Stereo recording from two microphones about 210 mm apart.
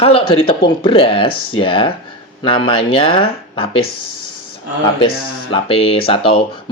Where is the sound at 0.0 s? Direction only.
25° left (ahead or behind).